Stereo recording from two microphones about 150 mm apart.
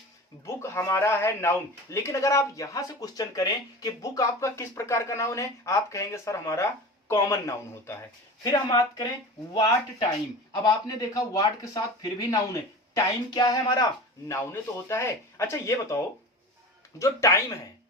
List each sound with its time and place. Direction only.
0.4 s a man's voice: 15° left (ahead or behind)
10.5 s a man's voice: 25° left (ahead or behind)